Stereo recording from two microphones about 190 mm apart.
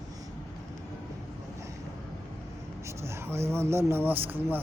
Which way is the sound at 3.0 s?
15° right (ahead or behind).